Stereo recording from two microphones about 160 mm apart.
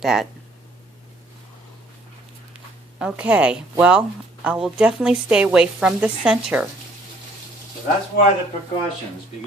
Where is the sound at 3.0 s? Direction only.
10° right (ahead or behind).